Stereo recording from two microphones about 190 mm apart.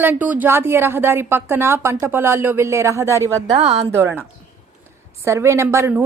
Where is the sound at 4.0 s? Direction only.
10° right (ahead or behind).